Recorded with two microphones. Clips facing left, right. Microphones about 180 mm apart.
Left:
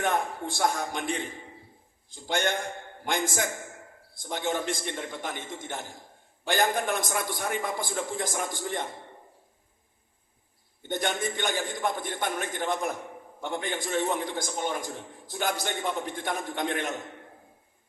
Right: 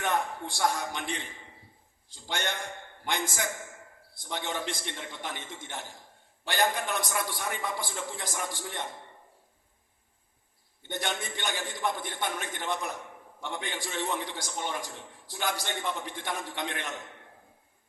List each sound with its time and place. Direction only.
0.0 s a man's voice: 45° left (ahead or behind)
10.8 s a man's voice: 45° left (ahead or behind)